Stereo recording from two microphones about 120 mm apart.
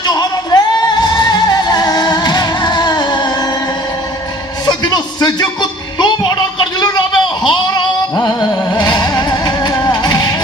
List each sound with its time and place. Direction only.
0.0 s music: 35° left (ahead or behind)
4.6 s a sound: 35° left (ahead or behind)
8.1 s music: 35° left (ahead or behind)